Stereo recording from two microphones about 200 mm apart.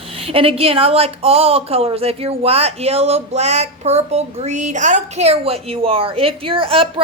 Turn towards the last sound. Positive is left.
turn(degrees=-25)  # may be behind; listen again after turning